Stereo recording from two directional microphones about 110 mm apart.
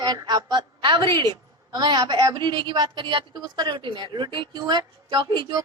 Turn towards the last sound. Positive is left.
turn(degrees=-40)  # may be behind; listen again after turning